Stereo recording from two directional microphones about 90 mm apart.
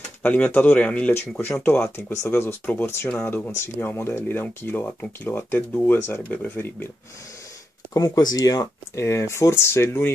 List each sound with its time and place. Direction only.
0.2 s speech: 15° left (ahead or behind)
7.9 s speech: 40° left (ahead or behind)
9.0 s speech: 30° left (ahead or behind)